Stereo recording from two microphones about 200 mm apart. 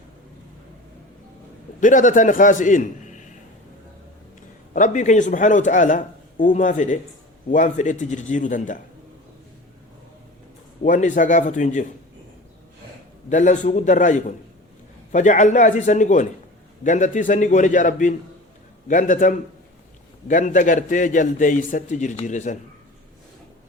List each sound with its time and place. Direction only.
1.8 s speech: 40° left (ahead or behind)
4.7 s speech: 40° left (ahead or behind)
10.8 s speech: 40° left (ahead or behind)
13.3 s speech: 35° left (ahead or behind)